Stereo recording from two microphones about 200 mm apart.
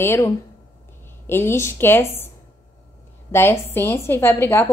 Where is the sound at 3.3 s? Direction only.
10° left (ahead or behind).